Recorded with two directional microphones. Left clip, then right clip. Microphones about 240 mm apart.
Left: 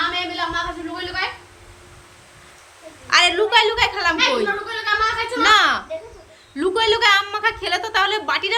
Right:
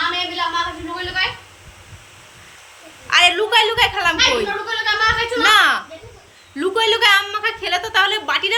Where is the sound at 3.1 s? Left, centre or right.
Centre.